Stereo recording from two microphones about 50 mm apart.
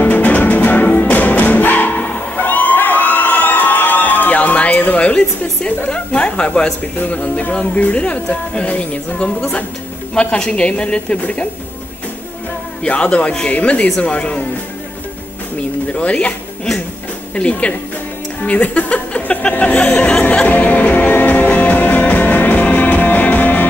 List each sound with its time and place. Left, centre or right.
0.0 s music: left
5.9 s speech: left
12.8 s speech: left
15.9 s speech: left
17.4 s speech: left
18.4 s music: left